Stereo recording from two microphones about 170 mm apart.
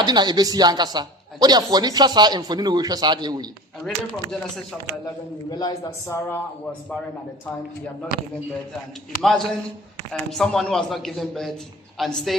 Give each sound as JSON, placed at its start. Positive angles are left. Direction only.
{"t": 0.0, "sound": "speech", "side_deg": -25}
{"t": 3.8, "sound": "a man's voice", "side_deg": 5}
{"t": 5.0, "sound": "a man's voice", "side_deg": 25}
{"t": 9.2, "sound": "a man's voice", "side_deg": 0}